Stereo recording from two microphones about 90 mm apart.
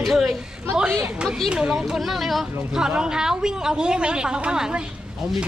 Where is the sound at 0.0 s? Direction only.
Centre (ahead or behind).